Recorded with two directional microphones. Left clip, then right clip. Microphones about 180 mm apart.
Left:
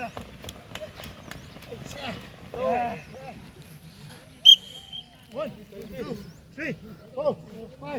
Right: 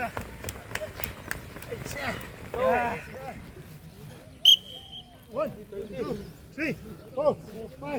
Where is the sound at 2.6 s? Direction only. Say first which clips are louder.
Right 1 dB; 5° right (ahead or behind).